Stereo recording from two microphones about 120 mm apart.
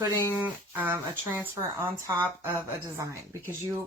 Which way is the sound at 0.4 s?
15° right (ahead or behind).